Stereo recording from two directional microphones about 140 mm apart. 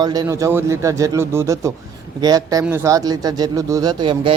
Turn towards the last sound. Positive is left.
turn(degrees=-35)  # may be behind; listen again after turning